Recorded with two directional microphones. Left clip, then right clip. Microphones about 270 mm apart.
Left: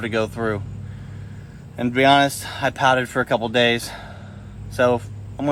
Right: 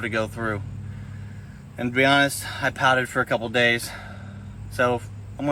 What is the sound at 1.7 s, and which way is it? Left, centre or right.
Speech, centre.